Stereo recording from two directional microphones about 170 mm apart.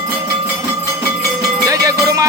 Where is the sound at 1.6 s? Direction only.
20° right (ahead or behind).